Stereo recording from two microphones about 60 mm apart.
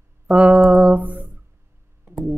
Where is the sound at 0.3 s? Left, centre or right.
Centre.